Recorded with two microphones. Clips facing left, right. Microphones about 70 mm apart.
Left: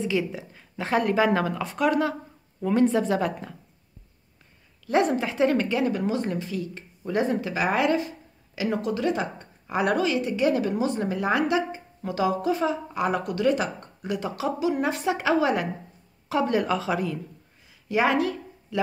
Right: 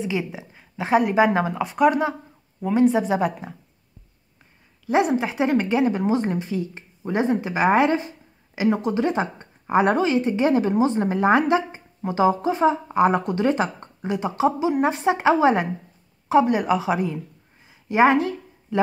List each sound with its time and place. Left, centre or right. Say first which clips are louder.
0.0 s speech: even; right
4.8 s speech: right 2 dB; centre
17.6 s a sound: right 6 dB; right